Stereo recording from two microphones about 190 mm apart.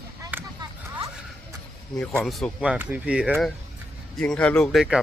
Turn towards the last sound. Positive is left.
turn(degrees=0)  # may be behind; listen again after turning